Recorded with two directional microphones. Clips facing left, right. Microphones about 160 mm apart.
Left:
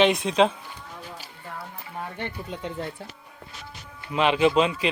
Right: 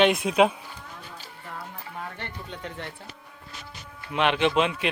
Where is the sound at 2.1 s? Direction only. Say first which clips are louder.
Left 5 dB; 15° left (ahead or behind).